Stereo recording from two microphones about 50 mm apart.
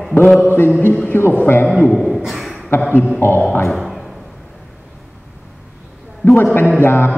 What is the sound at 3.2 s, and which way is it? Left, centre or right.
Speech, left.